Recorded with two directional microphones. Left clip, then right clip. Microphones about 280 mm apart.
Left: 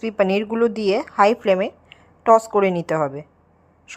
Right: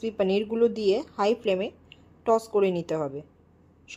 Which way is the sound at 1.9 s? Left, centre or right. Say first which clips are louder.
Left 6 dB; centre.